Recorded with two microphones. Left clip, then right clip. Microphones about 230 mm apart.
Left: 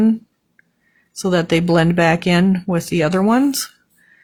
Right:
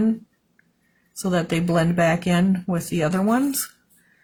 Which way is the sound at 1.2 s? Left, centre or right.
Left.